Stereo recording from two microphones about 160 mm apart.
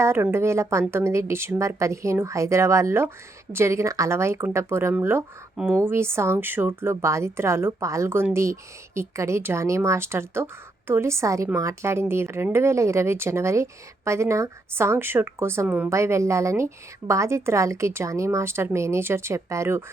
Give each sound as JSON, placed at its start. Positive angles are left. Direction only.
{"t": 0.0, "sound": "a woman's voice", "side_deg": -15}